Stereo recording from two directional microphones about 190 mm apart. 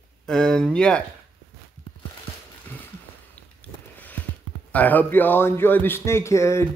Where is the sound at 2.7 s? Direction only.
10° left (ahead or behind).